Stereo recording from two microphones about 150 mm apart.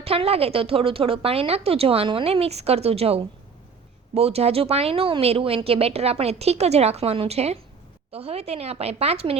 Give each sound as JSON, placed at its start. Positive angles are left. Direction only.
{"t": 0.0, "sound": "a woman's voice", "side_deg": -40}